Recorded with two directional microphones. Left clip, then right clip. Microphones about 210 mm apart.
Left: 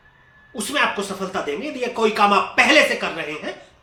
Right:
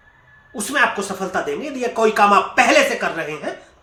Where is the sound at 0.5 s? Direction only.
15° right (ahead or behind).